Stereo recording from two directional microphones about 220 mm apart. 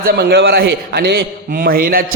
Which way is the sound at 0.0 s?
50° right (ahead or behind).